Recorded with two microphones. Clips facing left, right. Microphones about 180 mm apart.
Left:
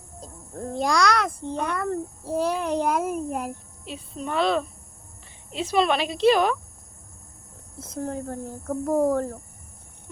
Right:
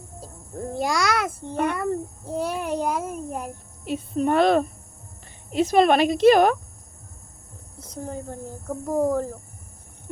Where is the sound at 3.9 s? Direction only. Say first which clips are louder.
Right 9 dB; 55° right (ahead or behind).